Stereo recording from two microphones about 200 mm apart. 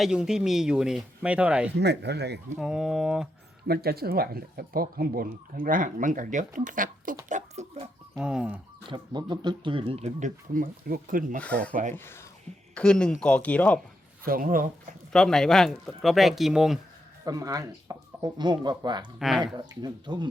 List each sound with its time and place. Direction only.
0.0 s speech: 5° right (ahead or behind)
1.7 s speech: 55° right (ahead or behind)
2.6 s speech: 5° right (ahead or behind)
3.7 s speech: 50° right (ahead or behind); by 7.9 s 35° right (ahead or behind)
8.2 s speech: 5° right (ahead or behind)
8.9 s speech: 20° right (ahead or behind); by 11.3 s 45° right (ahead or behind)
11.3 s speech: 5° left (ahead or behind)
11.7 s speech: 40° right (ahead or behind)
11.9 s speech: 10° left (ahead or behind)
14.3 s speech: 45° right (ahead or behind)
15.1 s speech: 5° left (ahead or behind)
17.2 s speech: 15° right (ahead or behind)
19.2 s speech: centre (ahead or behind)
19.5 s speech: 20° right (ahead or behind)